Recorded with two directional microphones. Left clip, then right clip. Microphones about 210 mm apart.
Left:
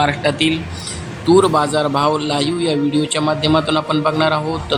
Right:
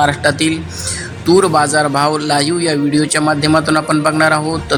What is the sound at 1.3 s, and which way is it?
A man's voice, 15° right (ahead or behind).